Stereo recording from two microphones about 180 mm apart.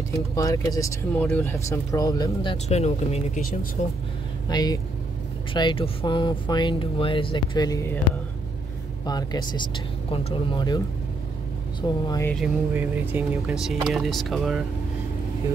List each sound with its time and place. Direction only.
0.3 s speech: 20° left (ahead or behind)
1.1 s speech: 10° left (ahead or behind)
2.5 s speech: 35° left (ahead or behind)
4.5 s speech: 20° left (ahead or behind)
9.0 s speech: 20° left (ahead or behind)
11.8 s speech: 20° left (ahead or behind)
12.7 s speech: 10° right (ahead or behind)